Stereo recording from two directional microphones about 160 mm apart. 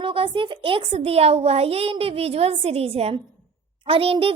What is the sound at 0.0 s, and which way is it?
A woman's voice, 35° right (ahead or behind).